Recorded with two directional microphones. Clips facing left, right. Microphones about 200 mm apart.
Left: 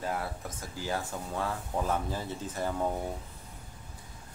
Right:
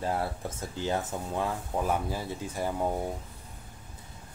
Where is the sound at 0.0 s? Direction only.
30° right (ahead or behind); by 2.9 s 10° right (ahead or behind).